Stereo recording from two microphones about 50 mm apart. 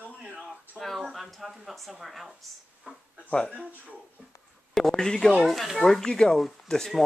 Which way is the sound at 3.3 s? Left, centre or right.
Centre.